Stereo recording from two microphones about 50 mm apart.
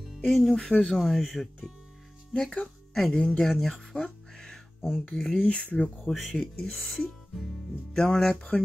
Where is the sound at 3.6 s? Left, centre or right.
Centre.